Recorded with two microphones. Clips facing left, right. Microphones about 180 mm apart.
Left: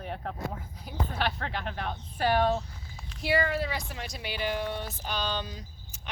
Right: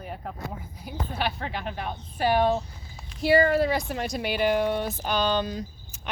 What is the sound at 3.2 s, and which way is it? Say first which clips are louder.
Speech: right 8 dB; 40° right (ahead or behind).